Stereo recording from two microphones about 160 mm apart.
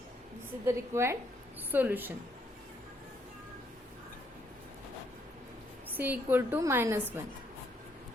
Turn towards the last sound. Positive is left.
turn(degrees=-15)  # may be behind; listen again after turning